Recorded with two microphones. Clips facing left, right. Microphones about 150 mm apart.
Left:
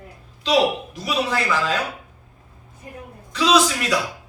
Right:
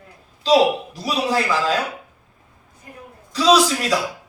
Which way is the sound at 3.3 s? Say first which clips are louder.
Right 2 dB; 35° right (ahead or behind).